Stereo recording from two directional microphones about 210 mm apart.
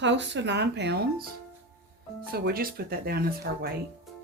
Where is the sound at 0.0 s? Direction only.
60° right (ahead or behind).